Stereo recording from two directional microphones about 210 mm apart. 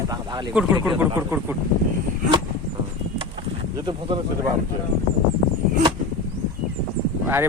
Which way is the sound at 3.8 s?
20° right (ahead or behind).